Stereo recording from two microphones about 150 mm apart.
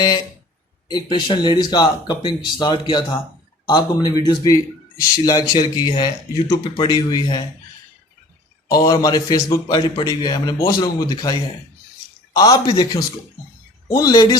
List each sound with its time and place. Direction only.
0.9 s speech: 30° left (ahead or behind)
8.6 s a man's voice: 25° left (ahead or behind)